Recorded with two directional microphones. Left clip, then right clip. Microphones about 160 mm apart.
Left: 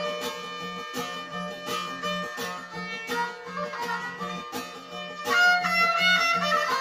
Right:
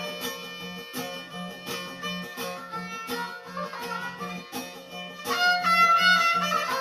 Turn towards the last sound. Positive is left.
turn(degrees=5)  # may be behind; listen again after turning